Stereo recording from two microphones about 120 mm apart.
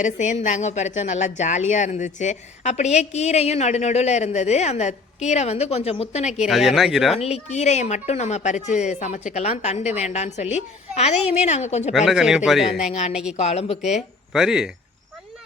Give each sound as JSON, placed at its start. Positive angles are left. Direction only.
{"t": 0.0, "sound": "speech", "side_deg": 90}
{"t": 6.5, "sound": "speech", "side_deg": 0}
{"t": 7.2, "sound": "speech", "side_deg": 60}
{"t": 11.9, "sound": "speech", "side_deg": -5}
{"t": 12.9, "sound": "speech", "side_deg": 65}
{"t": 13.8, "sound": "speech", "side_deg": 0}